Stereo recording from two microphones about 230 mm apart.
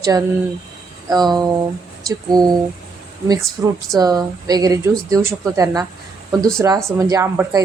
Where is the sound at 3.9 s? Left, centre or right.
Centre.